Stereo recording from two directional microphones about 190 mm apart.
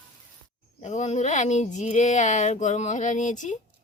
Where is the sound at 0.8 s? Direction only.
35° left (ahead or behind).